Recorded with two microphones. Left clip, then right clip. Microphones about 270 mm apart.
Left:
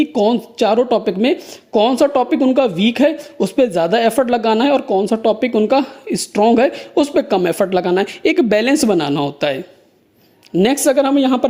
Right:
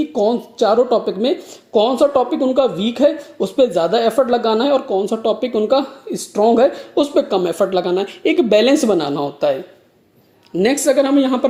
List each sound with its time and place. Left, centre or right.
0.0 s speech: left
0.9 s speech: left
1.9 s speech: left
3.8 s a woman's voice: left
4.3 s speech: left
5.2 s a woman's voice: left
6.1 s speech: left
6.9 s a woman's voice: left
8.0 s speech: left
8.4 s speech: left
9.0 s speech: left